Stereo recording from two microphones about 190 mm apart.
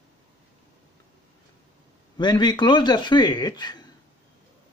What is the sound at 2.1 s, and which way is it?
Speech, 20° left (ahead or behind).